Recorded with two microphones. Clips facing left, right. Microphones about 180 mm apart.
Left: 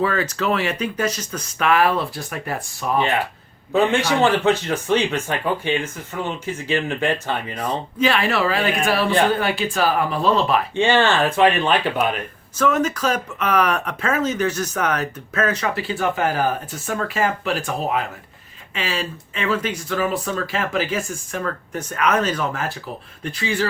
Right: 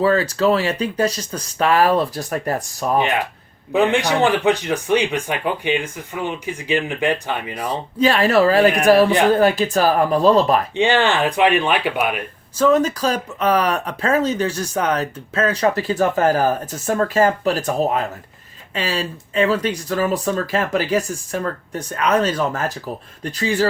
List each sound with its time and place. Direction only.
0.0 s speech: 35° right (ahead or behind)
3.0 s speech: 20° right (ahead or behind)
7.9 s speech: 35° right (ahead or behind)
10.8 s speech: 15° right (ahead or behind)
12.5 s speech: 35° right (ahead or behind)